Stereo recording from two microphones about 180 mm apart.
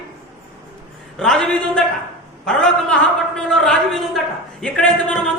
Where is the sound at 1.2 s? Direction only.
5° left (ahead or behind).